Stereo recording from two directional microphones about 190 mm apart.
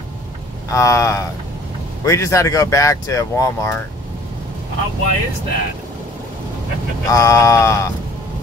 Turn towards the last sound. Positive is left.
turn(degrees=15)  # may be behind; listen again after turning